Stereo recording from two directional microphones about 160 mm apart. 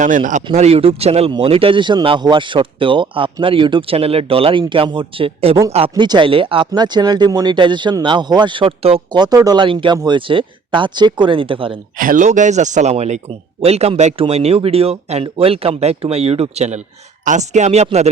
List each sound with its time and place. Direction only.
0.0 s speech: 50° right (ahead or behind)
0.5 s speech: 40° right (ahead or behind)
11.9 s speech: 55° right (ahead or behind)